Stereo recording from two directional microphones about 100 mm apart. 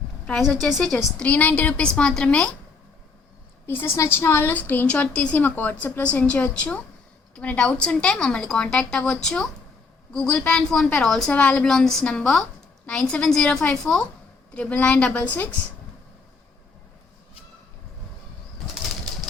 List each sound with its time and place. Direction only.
0.3 s a woman's voice: 5° left (ahead or behind)
1.2 s speech: 15° left (ahead or behind)
3.7 s a woman's voice: 25° left (ahead or behind)